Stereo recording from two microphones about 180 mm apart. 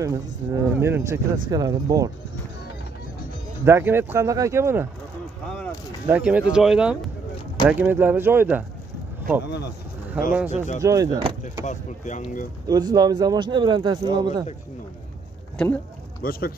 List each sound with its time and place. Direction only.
0.0 s speech: 20° right (ahead or behind)
3.6 s speech: 15° right (ahead or behind)
6.0 s speech: 10° right (ahead or behind)
10.3 s speech: 10° right (ahead or behind)
11.6 s speech: 40° left (ahead or behind)
12.6 s speech: 20° right (ahead or behind)
15.5 s speech: 10° left (ahead or behind)
16.2 s speech: 55° left (ahead or behind)